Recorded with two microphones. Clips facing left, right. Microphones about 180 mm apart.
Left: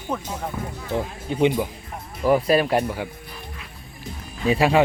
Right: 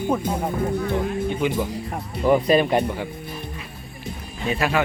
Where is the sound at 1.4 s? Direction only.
20° left (ahead or behind).